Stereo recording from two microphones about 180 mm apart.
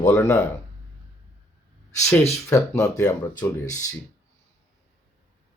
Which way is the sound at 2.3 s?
15° left (ahead or behind).